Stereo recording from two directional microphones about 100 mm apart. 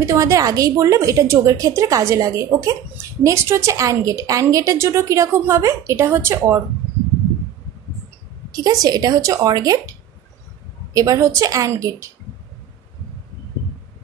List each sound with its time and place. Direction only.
0.0 s a woman's voice: 30° right (ahead or behind)
8.5 s a woman's voice: 40° right (ahead or behind)